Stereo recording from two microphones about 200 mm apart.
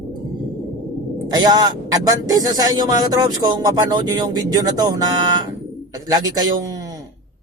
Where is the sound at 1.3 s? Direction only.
20° right (ahead or behind).